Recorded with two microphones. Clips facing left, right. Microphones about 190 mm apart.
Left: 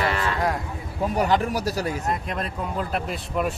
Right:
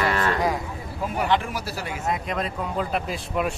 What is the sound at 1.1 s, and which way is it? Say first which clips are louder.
Speech: left 2 dB; 40° left (ahead or behind).